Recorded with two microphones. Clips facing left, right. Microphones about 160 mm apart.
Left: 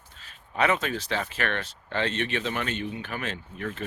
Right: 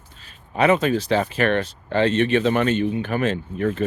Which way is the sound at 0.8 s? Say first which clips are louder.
Right 10 dB; 15° right (ahead or behind).